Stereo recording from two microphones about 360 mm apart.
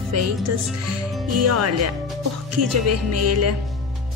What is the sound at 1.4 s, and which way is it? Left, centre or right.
Speech, right.